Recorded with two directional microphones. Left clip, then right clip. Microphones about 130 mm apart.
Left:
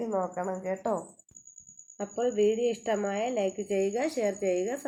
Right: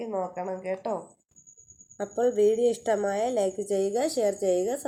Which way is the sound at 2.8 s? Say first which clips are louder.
Right 4 dB; 30° right (ahead or behind).